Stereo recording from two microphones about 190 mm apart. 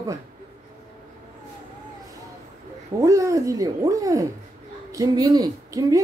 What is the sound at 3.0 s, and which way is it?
Speech, 15° right (ahead or behind).